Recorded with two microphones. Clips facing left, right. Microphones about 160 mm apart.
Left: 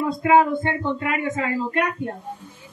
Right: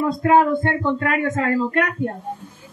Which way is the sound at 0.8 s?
50° right (ahead or behind).